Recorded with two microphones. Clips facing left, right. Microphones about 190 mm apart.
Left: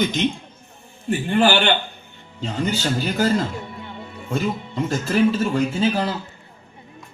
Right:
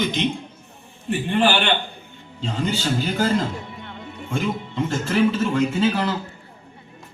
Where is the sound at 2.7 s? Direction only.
40° left (ahead or behind).